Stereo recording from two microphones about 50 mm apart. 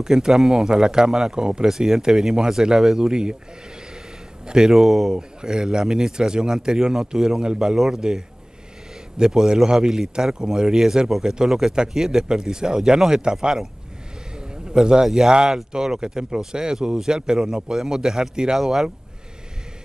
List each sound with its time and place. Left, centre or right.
0.0 s speech: centre
4.5 s speech: centre
5.1 s speech: centre
9.2 s speech: centre
14.7 s a man's voice: centre